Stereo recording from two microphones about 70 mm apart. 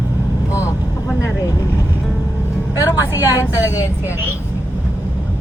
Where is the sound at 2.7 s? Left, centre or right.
Left.